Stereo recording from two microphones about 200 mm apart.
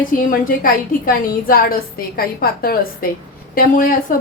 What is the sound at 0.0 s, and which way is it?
A woman's voice, 45° left (ahead or behind).